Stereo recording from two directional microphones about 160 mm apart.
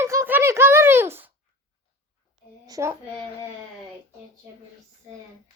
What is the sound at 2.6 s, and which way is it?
Speech, 20° right (ahead or behind).